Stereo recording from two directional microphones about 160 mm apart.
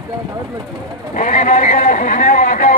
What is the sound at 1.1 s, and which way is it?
A man's voice, 50° left (ahead or behind).